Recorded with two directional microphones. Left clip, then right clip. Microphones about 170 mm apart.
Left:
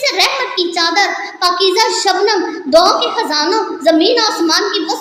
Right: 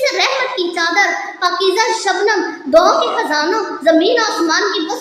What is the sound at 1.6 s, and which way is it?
A child's voice, 30° left (ahead or behind).